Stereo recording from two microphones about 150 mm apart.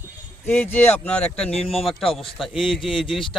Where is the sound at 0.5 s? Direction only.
15° left (ahead or behind).